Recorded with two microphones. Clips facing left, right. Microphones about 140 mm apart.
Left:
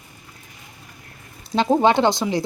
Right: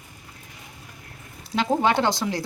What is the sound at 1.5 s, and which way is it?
Speech, 25° left (ahead or behind).